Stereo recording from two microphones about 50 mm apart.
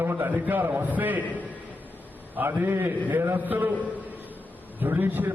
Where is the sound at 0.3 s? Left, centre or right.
Right.